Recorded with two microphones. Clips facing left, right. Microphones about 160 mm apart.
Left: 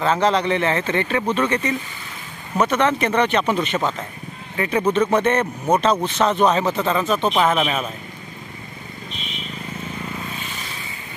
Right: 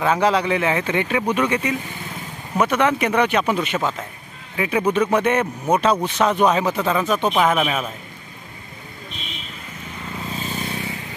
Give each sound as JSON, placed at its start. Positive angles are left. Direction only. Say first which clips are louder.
{"t": 0.0, "sound": "speech", "louder": "even", "side_deg": -10}
{"t": 10.3, "sound": "vehicle", "louder": "right 5 dB", "side_deg": -40}